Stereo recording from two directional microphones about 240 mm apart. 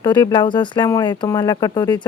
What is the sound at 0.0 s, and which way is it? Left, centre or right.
Speech, centre.